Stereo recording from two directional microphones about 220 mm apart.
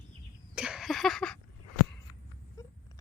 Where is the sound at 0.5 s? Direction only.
5° right (ahead or behind).